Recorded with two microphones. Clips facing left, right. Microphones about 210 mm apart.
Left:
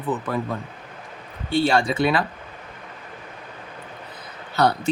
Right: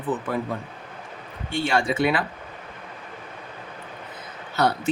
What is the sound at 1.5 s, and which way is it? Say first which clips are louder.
Speech: left 4 dB; 35° left (ahead or behind).